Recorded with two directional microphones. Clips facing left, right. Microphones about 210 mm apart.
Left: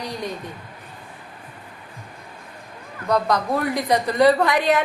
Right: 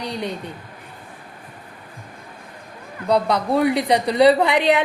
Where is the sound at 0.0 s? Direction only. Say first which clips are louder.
Right 2 dB; 65° right (ahead or behind).